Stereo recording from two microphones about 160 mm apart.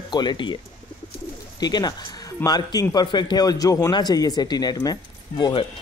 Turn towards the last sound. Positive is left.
turn(degrees=30)  # may be behind; listen again after turning